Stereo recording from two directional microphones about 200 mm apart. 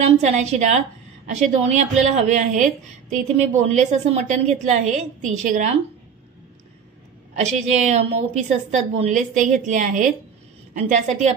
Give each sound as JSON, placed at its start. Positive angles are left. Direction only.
{"t": 0.0, "sound": "a woman's voice", "side_deg": -35}
{"t": 7.3, "sound": "a woman's voice", "side_deg": -35}